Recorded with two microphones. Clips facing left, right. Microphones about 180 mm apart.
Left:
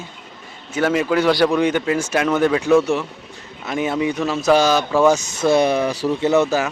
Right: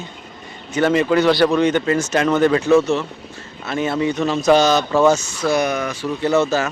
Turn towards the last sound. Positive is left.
turn(degrees=15)  # may be behind; listen again after turning